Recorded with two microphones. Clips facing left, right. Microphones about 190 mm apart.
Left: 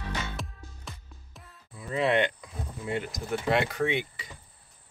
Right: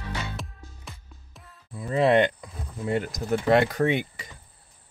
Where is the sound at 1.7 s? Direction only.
40° right (ahead or behind).